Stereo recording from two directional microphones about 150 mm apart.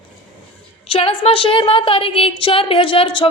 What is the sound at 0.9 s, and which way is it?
A woman's voice, 40° left (ahead or behind).